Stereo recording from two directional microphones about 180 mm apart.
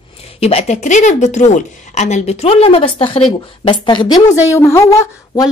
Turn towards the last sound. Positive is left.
turn(degrees=15)  # may be behind; listen again after turning